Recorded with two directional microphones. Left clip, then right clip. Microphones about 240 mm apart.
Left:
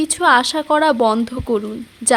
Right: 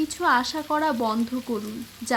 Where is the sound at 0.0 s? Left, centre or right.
Left.